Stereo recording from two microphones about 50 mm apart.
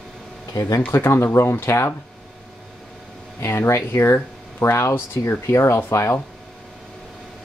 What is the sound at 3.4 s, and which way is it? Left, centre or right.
Speech, left.